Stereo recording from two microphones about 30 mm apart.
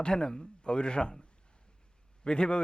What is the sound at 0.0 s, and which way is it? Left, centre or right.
A man's voice, left.